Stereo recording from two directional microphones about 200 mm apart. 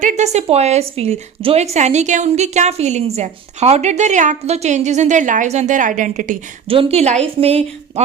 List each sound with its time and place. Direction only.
0.0 s a woman's voice: 40° right (ahead or behind)
6.7 s speech: 30° right (ahead or behind)